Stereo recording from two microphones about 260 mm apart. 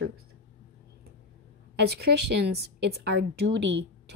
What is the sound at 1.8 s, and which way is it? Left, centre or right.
A woman's voice, right.